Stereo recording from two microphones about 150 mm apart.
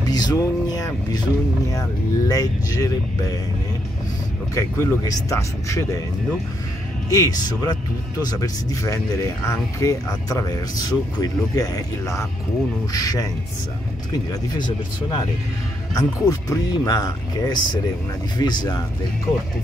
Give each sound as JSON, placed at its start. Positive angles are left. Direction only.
{"t": 0.0, "sound": "speech", "side_deg": 25}
{"t": 4.6, "sound": "speech", "side_deg": 20}
{"t": 7.1, "sound": "speech", "side_deg": 25}
{"t": 14.5, "sound": "speech", "side_deg": 25}